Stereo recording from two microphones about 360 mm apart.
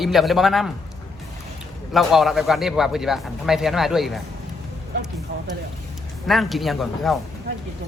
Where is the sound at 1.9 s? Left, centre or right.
Centre.